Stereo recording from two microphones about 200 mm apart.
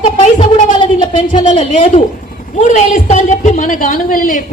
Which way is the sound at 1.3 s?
35° left (ahead or behind).